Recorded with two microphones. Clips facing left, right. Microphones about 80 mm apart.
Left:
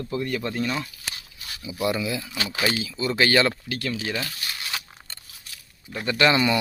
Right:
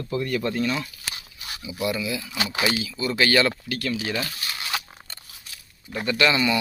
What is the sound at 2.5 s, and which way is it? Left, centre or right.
Speech, centre.